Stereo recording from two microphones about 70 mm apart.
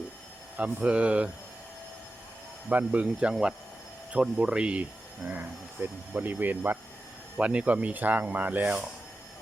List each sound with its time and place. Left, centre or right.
0.5 s speech: centre
2.6 s speech: centre
7.3 s speech: centre